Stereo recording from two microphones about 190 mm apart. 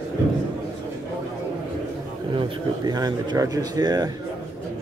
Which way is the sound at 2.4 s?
20° right (ahead or behind).